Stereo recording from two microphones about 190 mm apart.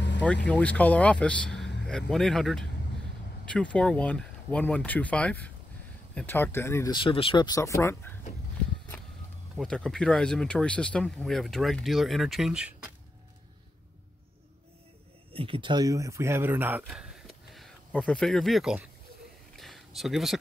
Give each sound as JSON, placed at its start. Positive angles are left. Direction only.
{"t": 0.5, "sound": "speech", "side_deg": 5}
{"t": 9.6, "sound": "speech", "side_deg": 5}
{"t": 15.3, "sound": "speech", "side_deg": -30}
{"t": 19.5, "sound": "a sound", "side_deg": 0}